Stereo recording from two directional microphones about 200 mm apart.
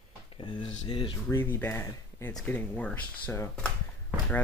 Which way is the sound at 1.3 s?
10° left (ahead or behind).